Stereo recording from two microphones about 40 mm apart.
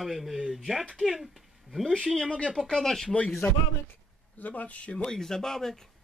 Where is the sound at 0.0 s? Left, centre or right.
Centre.